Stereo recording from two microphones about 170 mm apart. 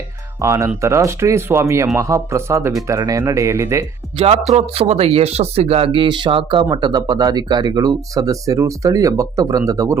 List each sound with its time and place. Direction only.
0.4 s speech: 15° right (ahead or behind)
4.2 s speech: 40° right (ahead or behind); by 10.0 s 20° right (ahead or behind)